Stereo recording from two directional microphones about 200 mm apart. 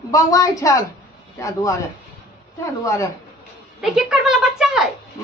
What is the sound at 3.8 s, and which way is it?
Speech, 5° right (ahead or behind).